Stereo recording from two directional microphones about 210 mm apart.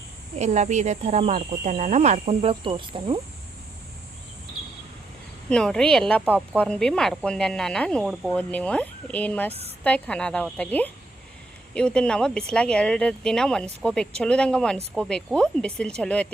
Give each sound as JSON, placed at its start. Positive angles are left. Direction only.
{"t": 0.3, "sound": "speech", "side_deg": -35}
{"t": 5.5, "sound": "speech", "side_deg": 5}
{"t": 9.5, "sound": "a woman's voice", "side_deg": -30}
{"t": 9.8, "sound": "a woman's voice", "side_deg": 5}